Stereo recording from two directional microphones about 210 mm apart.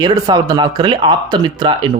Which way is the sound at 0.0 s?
20° right (ahead or behind).